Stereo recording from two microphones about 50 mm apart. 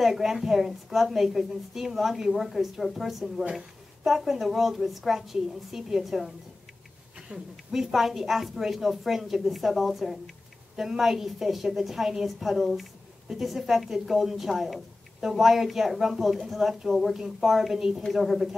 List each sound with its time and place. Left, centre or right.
0.0 s a woman's voice: centre
7.2 s a sound: centre
7.7 s a woman's voice: centre